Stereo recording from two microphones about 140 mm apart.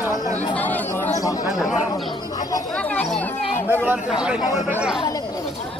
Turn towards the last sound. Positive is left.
turn(degrees=-5)  # may be behind; listen again after turning